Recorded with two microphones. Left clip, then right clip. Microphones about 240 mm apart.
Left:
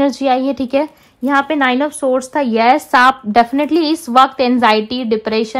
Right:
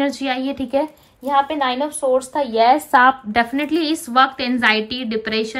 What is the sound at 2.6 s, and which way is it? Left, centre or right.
Speech, right.